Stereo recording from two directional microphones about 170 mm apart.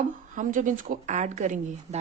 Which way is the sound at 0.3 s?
50° right (ahead or behind).